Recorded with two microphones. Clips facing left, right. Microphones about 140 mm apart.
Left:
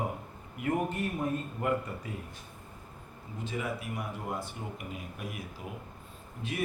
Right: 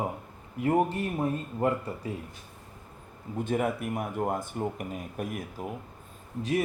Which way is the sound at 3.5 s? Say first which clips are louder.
Right 7 dB; 50° right (ahead or behind).